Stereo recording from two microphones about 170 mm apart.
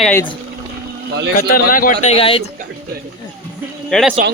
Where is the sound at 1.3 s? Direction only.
55° left (ahead or behind).